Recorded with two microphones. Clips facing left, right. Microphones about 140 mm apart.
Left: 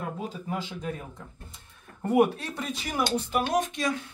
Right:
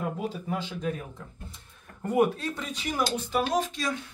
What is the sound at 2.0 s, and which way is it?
Speech, 10° left (ahead or behind).